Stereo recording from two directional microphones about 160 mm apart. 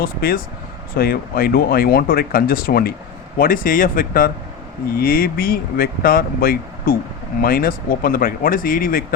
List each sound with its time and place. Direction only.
0.0 s speech: 65° left (ahead or behind)